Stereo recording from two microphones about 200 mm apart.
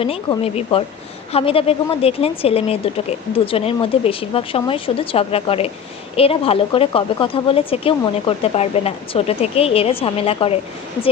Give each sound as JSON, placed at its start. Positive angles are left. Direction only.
{"t": 0.0, "sound": "a woman's voice", "side_deg": 30}